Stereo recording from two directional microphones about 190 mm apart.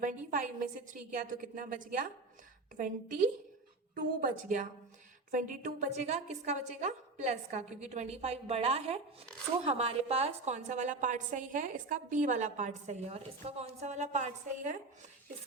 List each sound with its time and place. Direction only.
0.3 s a woman's voice: 40° right (ahead or behind)